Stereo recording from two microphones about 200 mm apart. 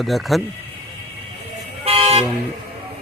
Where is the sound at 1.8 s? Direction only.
30° right (ahead or behind).